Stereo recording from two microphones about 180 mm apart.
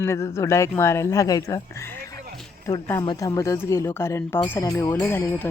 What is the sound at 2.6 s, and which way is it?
Speech, 15° left (ahead or behind).